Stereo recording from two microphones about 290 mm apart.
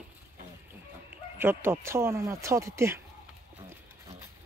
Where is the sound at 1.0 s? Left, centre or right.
Centre.